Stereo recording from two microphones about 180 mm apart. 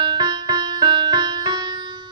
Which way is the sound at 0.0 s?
20° right (ahead or behind).